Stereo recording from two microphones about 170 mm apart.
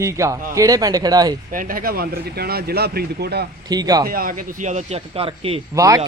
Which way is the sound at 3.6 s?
25° right (ahead or behind).